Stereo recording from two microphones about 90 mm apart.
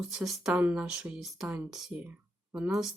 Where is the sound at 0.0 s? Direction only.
5° right (ahead or behind).